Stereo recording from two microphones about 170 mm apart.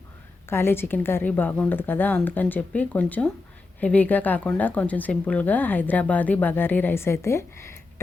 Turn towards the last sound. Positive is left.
turn(degrees=15)  # may be behind; listen again after turning